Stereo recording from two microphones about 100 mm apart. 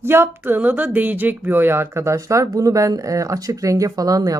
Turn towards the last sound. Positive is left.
turn(degrees=-35)  # may be behind; listen again after turning